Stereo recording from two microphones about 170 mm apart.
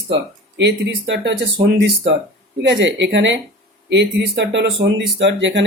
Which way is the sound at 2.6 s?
90° right.